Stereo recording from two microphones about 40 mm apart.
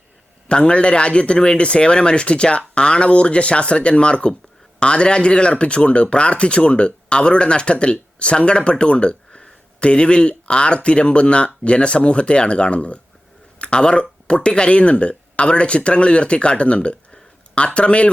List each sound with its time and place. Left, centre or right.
0.4 s speech: left